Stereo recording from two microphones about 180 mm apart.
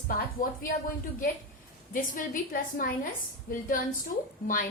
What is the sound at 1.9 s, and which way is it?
A woman's voice, 50° left (ahead or behind).